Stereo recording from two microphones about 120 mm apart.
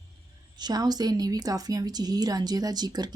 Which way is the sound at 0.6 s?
35° right (ahead or behind).